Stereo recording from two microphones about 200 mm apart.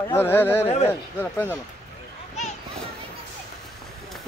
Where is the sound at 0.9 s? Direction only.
10° left (ahead or behind).